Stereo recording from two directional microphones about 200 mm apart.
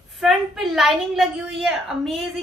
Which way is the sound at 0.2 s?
Centre (ahead or behind).